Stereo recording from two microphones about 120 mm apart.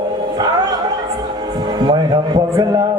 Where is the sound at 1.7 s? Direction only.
40° right (ahead or behind).